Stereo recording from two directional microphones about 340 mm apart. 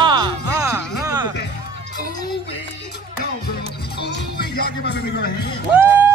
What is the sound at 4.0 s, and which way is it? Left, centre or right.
Speech, left.